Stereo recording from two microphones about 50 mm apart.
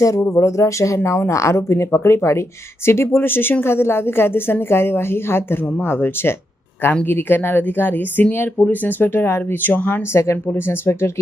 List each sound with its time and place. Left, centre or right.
0.3 s speech: left
10.1 s speech: left